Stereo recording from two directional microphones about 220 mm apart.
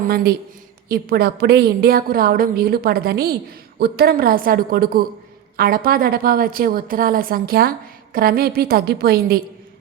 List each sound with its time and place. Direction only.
0.1 s a woman's voice: 45° right (ahead or behind)